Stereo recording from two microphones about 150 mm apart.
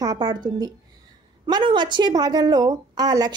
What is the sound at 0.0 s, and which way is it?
A woman's voice, 25° right (ahead or behind).